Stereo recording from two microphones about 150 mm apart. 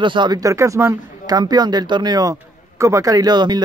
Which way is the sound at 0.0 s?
30° right (ahead or behind).